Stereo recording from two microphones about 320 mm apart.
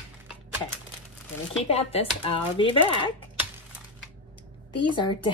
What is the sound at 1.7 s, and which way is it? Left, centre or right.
Speech, centre.